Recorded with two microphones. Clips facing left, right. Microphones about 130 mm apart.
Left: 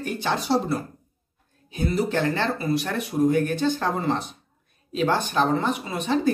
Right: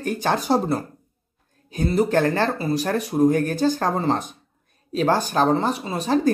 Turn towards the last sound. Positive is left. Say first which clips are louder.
# right 2 dB
turn(degrees=-35)  # may be behind; listen again after turning